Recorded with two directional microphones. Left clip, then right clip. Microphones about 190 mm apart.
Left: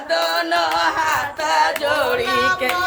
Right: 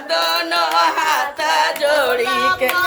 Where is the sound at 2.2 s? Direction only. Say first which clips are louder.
Right 1 dB; 10° right (ahead or behind).